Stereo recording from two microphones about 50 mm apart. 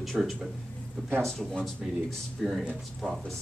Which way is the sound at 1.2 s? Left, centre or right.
Centre.